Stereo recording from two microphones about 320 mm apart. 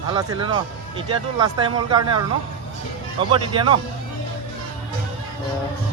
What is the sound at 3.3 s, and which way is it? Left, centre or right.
Speech, centre.